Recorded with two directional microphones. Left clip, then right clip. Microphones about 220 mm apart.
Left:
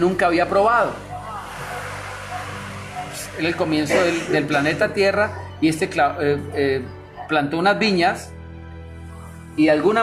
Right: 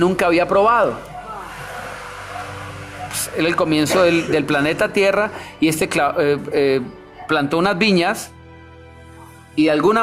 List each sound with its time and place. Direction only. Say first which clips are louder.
0.0 s speech: right 2 dB; 40° right (ahead or behind)
3.3 s speech: right 4 dB; 45° right (ahead or behind)
9.6 s speech: right 1 dB; 30° right (ahead or behind)